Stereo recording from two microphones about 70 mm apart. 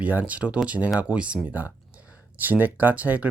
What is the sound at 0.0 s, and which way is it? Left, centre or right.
Speech, right.